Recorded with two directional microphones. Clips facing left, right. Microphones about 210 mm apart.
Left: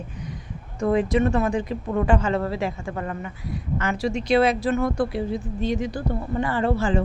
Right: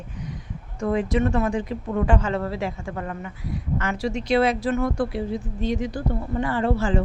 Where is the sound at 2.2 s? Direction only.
15° left (ahead or behind).